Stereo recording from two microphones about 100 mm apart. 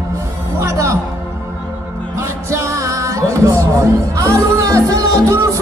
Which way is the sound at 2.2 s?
30° right (ahead or behind).